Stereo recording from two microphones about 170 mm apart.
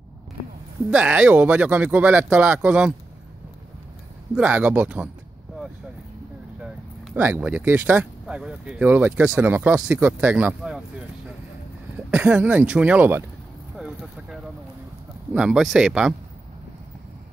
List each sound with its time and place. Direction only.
0.8 s speech: 5° right (ahead or behind)
4.4 s speech: 5° right (ahead or behind)
6.6 s speech: 5° right (ahead or behind)
12.1 s speech: 5° right (ahead or behind)
13.7 s a sound: centre (ahead or behind)
15.3 s speech: 5° right (ahead or behind)